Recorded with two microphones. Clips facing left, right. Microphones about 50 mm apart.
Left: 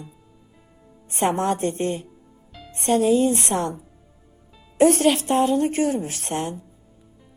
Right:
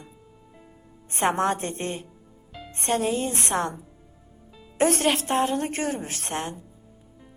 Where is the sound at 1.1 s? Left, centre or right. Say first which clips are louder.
Left 1 dB; right.